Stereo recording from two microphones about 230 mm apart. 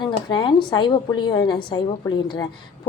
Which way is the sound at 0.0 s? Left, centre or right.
Centre.